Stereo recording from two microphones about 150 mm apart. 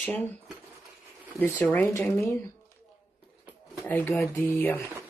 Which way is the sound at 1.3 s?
15° left (ahead or behind).